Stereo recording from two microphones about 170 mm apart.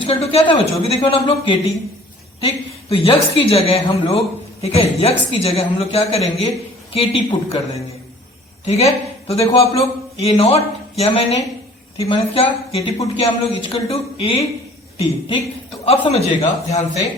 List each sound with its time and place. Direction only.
0.0 s a woman's voice: 35° left (ahead or behind)
2.9 s a woman's voice: 30° left (ahead or behind)
15.8 s a woman's voice: 35° left (ahead or behind)